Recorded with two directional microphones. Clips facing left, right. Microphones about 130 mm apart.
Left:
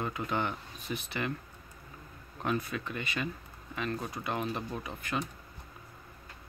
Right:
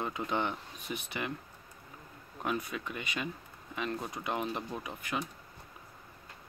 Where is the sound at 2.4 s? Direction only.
15° right (ahead or behind).